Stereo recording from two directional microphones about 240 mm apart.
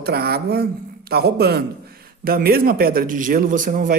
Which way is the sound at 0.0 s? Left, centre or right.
Right.